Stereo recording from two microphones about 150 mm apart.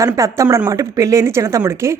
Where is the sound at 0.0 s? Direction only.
20° right (ahead or behind).